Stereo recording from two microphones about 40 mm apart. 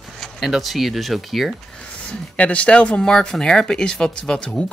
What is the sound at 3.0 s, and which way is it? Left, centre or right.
Speech, centre.